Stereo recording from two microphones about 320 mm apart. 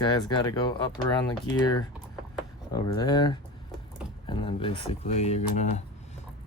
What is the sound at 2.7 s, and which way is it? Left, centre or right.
Speech, centre.